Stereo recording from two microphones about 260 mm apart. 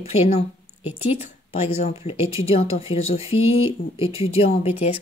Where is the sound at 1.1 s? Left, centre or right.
Left.